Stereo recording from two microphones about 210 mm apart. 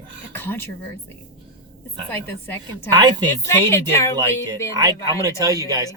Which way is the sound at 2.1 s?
10° left (ahead or behind).